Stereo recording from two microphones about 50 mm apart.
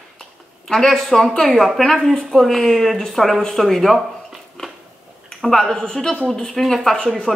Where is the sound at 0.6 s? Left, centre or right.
Centre.